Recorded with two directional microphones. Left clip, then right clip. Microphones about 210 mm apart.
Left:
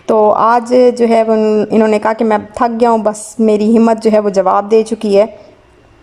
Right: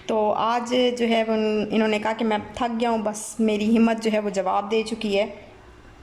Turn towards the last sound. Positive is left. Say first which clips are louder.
# left 13 dB
turn(degrees=25)  # may be behind; listen again after turning